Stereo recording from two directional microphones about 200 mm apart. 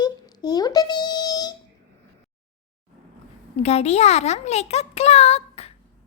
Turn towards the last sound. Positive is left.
turn(degrees=30)  # may be behind; listen again after turning